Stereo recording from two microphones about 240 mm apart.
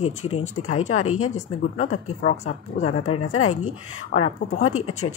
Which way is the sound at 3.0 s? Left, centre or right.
Left.